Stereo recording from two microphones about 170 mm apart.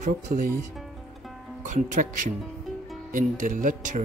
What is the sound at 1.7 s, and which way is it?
Speech, 50° right (ahead or behind).